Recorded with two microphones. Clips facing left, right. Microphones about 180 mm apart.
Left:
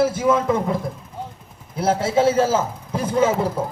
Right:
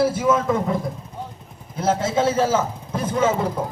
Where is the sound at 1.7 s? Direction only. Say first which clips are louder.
Left 2 dB; 10° left (ahead or behind).